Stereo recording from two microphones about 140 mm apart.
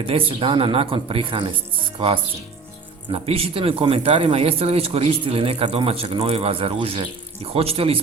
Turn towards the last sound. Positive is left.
turn(degrees=-45)  # may be behind; listen again after turning